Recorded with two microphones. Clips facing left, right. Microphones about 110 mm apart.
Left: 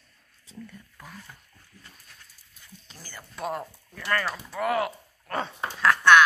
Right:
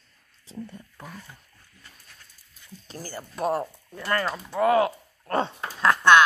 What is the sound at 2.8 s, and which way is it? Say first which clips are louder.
Speech: right 10 dB; 40° right (ahead or behind).